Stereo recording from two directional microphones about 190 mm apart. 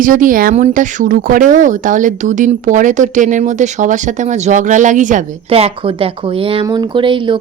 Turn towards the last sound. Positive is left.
turn(degrees=-25)  # may be behind; listen again after turning